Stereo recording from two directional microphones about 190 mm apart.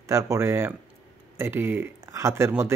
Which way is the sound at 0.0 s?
15° right (ahead or behind).